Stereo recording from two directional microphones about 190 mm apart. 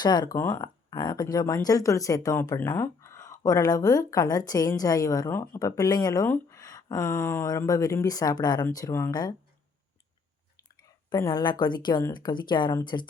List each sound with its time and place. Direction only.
0.0 s a woman's voice: 20° left (ahead or behind)
11.1 s speech: 20° left (ahead or behind)